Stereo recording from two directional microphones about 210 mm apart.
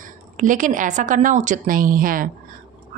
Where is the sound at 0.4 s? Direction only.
40° right (ahead or behind).